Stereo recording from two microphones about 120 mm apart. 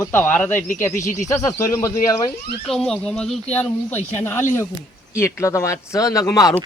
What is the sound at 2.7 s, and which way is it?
Speech, 5° left (ahead or behind).